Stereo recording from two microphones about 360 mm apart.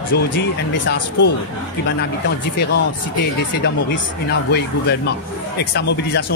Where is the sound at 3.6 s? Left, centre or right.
Left.